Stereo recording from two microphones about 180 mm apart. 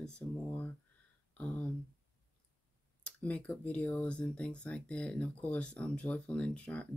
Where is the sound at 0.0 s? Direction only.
10° left (ahead or behind).